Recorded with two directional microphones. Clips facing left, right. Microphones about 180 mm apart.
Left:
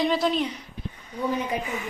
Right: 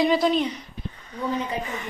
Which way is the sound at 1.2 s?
15° left (ahead or behind).